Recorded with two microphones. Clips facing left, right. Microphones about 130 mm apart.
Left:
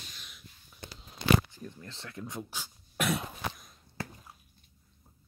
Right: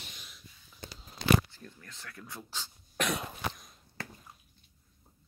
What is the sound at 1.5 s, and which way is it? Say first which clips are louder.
Speech: left 6 dB; 20° left (ahead or behind).